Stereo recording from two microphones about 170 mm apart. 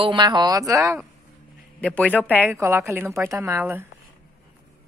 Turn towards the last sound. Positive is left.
turn(degrees=-15)  # may be behind; listen again after turning